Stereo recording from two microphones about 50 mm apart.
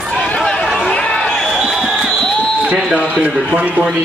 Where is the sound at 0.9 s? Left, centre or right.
Centre.